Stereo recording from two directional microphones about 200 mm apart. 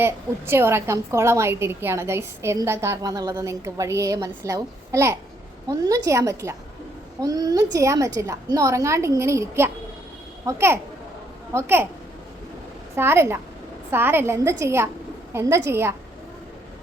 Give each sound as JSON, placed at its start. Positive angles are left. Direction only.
{"t": 0.0, "sound": "a woman's voice", "side_deg": -10}
{"t": 13.0, "sound": "a woman's voice", "side_deg": -10}